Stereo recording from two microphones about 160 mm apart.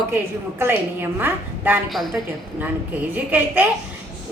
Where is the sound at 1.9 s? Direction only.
Centre (ahead or behind).